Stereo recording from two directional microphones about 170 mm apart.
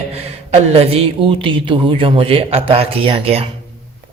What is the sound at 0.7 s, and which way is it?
A man's voice, 35° right (ahead or behind).